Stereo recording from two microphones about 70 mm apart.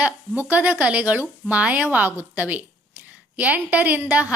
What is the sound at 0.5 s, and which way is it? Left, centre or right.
A woman's voice, right.